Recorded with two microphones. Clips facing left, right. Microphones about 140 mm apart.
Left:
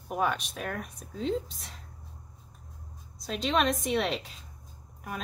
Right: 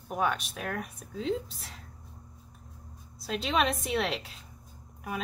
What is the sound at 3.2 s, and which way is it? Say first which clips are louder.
Speech: left 1 dB; 5° right (ahead or behind).